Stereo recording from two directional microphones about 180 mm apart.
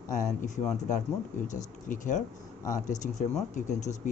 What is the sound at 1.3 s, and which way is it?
Speech, 45° left (ahead or behind).